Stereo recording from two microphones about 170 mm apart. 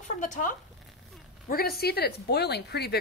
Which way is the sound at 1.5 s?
65° left (ahead or behind).